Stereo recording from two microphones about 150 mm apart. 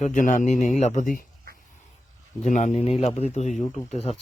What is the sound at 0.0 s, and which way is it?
Speech, 55° left (ahead or behind).